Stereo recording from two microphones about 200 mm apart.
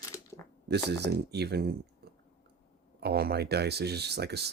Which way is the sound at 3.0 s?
50° right (ahead or behind).